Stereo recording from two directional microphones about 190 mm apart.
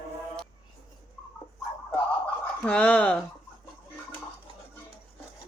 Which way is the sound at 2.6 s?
5° left (ahead or behind).